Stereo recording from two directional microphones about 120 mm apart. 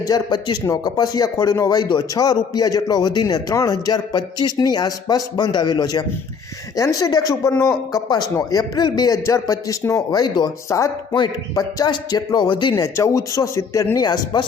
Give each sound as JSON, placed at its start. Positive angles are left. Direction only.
{"t": 0.0, "sound": "speech", "side_deg": 35}
{"t": 12.7, "sound": "speech", "side_deg": 25}